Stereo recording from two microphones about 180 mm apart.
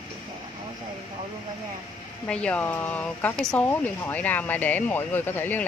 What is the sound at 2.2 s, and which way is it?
Speech, 5° left (ahead or behind).